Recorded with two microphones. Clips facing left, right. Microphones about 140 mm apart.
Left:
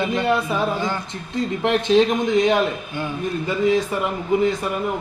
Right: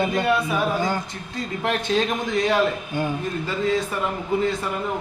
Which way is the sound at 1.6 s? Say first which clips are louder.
Left 6 dB; 20° left (ahead or behind).